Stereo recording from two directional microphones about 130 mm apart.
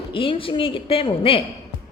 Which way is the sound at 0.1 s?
40° left (ahead or behind).